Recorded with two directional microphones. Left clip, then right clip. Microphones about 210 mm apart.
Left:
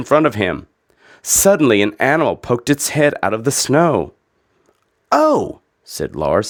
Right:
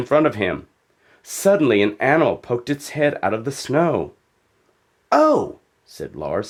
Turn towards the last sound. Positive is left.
turn(degrees=45)  # may be behind; listen again after turning